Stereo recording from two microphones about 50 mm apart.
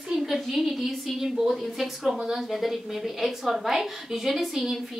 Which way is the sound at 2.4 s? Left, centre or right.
Centre.